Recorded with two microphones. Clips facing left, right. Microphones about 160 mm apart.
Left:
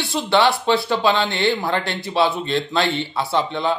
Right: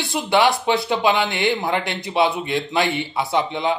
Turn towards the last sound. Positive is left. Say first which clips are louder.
# even
turn(degrees=-15)  # may be behind; listen again after turning